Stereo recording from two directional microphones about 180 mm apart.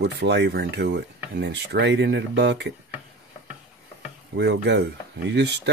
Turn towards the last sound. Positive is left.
turn(degrees=-70)  # may be behind; listen again after turning